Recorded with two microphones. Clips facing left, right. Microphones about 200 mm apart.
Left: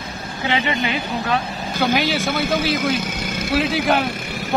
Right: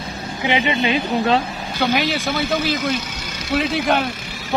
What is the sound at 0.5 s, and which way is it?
Speech, 20° right (ahead or behind).